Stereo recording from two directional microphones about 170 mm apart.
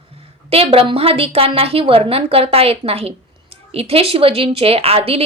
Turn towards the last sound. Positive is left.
turn(degrees=-35)  # may be behind; listen again after turning